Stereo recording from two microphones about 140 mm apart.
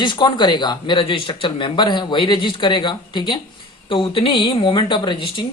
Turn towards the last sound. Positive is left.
turn(degrees=35)  # may be behind; listen again after turning